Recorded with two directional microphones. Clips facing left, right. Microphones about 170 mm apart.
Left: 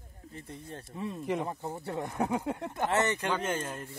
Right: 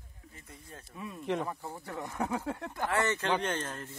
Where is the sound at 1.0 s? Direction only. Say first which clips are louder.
Left 1 dB; 30° left (ahead or behind); by 3.8 s 10° left (ahead or behind).